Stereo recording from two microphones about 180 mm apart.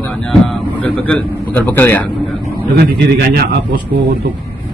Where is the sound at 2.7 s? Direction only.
65° right (ahead or behind).